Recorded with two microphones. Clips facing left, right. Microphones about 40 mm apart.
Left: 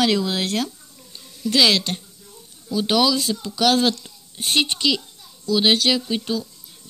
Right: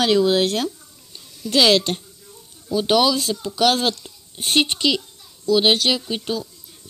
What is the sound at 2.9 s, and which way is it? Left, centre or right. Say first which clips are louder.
Speech: right 1 dB; right.